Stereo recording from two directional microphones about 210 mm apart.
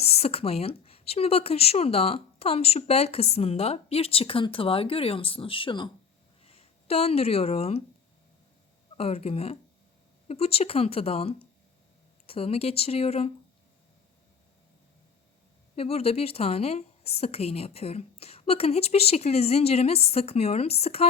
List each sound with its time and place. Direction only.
0.0 s a woman's voice: 30° left (ahead or behind)
9.0 s a woman's voice: 30° left (ahead or behind)
15.7 s a woman's voice: 30° left (ahead or behind)